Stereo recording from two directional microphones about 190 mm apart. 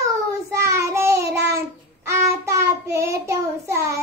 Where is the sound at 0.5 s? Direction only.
15° right (ahead or behind).